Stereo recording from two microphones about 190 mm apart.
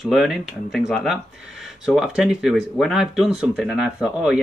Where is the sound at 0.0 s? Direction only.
Centre (ahead or behind).